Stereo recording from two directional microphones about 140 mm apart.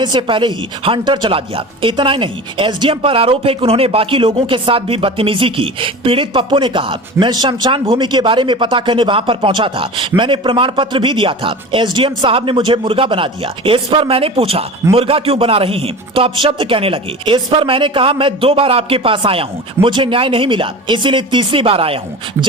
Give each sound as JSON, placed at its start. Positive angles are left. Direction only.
{"t": 0.0, "sound": "speech", "side_deg": -35}